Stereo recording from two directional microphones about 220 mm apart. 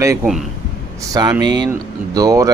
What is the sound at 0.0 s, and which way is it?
Speech, 15° right (ahead or behind).